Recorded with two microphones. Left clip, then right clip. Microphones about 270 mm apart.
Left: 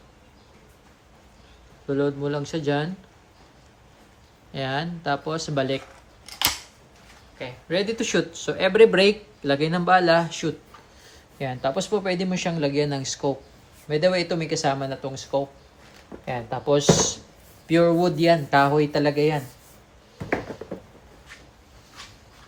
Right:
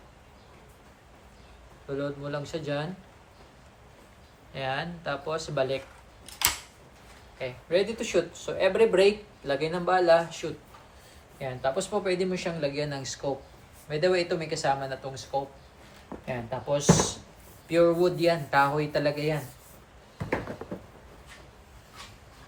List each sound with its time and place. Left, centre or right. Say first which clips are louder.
1.9 s speech: left 8 dB; left
4.5 s speech: left 4 dB; left
7.3 s speech: left 1 dB; left
16.2 s speech: left 6 dB; left